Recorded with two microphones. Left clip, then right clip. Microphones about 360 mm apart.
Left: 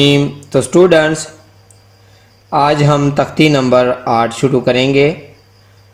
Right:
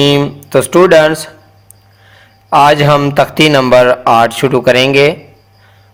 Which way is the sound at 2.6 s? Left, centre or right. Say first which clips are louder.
Right 4 dB; right.